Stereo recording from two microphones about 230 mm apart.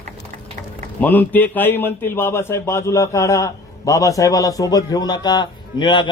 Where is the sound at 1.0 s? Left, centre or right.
Centre.